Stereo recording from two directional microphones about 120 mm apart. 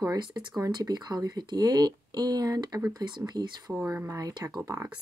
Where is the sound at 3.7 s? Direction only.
15° right (ahead or behind).